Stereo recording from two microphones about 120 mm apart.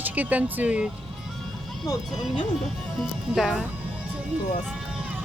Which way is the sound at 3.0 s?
Centre (ahead or behind).